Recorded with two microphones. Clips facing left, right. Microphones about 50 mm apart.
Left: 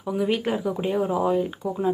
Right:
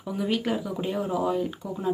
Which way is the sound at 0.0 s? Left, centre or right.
Centre.